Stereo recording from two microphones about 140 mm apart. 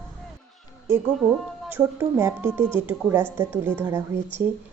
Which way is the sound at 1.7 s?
20° right (ahead or behind).